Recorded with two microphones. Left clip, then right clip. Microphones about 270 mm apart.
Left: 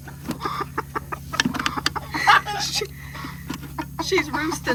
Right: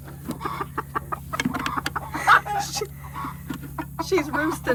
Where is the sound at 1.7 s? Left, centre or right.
Centre.